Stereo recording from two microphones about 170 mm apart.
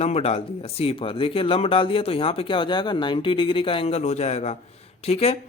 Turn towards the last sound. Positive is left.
turn(degrees=35)  # may be behind; listen again after turning